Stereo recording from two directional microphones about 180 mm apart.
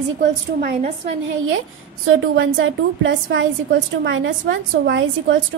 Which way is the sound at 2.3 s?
90° right.